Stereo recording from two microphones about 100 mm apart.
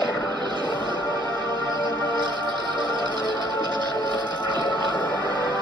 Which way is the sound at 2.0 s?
45° left (ahead or behind).